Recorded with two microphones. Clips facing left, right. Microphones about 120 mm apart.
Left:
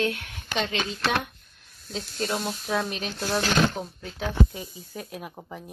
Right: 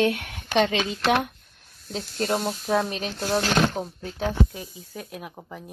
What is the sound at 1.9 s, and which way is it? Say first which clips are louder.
Speech: right 3 dB; 55° right (ahead or behind).